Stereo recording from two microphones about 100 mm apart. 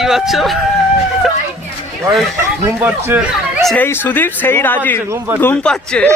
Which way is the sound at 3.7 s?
20° left (ahead or behind).